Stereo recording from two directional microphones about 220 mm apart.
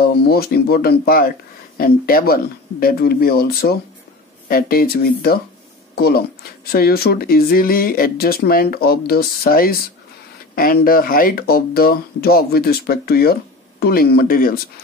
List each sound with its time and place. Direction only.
0.0 s speech: 45° left (ahead or behind)